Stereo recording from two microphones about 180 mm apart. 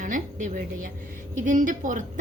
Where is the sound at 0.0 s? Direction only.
45° right (ahead or behind).